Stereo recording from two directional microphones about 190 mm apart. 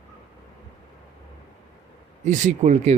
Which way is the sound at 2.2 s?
40° right (ahead or behind).